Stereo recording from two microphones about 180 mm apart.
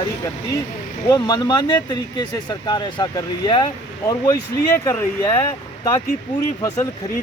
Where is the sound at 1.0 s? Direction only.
20° left (ahead or behind).